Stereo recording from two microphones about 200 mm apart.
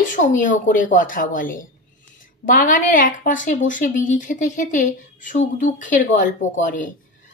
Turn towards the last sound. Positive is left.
turn(degrees=40)  # may be behind; listen again after turning